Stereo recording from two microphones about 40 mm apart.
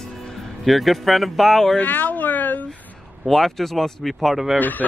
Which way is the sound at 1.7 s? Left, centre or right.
Left.